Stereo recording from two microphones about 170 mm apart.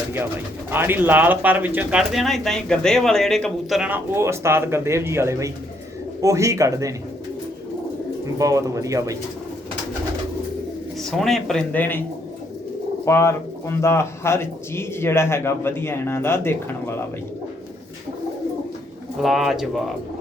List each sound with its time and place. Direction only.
0.7 s a man's voice: 15° right (ahead or behind)
8.4 s a man's voice: 20° right (ahead or behind)
11.0 s a man's voice: centre (ahead or behind)
13.1 s speech: 15° left (ahead or behind)
19.2 s a man's voice: centre (ahead or behind)